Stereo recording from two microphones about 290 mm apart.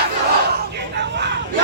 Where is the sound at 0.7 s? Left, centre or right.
Right.